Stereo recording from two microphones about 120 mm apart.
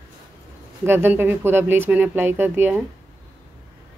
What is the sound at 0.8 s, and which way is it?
Speech, 20° right (ahead or behind).